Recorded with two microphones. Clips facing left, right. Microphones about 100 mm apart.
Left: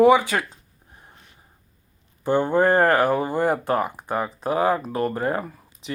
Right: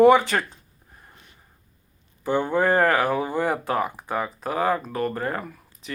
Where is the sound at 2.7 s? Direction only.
Centre (ahead or behind).